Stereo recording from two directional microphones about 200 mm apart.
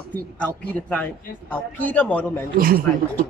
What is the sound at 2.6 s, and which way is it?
Speech, 45° right (ahead or behind).